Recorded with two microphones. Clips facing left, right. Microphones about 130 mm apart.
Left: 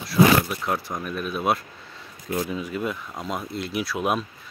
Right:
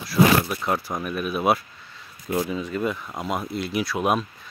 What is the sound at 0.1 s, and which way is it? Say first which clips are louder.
Speech: left 1 dB; centre (ahead or behind).